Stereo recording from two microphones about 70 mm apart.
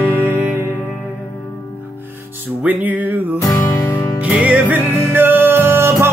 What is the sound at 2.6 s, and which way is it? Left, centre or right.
Music, right.